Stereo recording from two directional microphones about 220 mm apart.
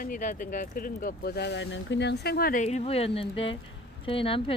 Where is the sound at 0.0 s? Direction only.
35° left (ahead or behind).